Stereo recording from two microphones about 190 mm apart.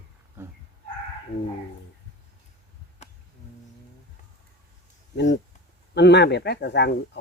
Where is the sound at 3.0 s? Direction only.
35° left (ahead or behind).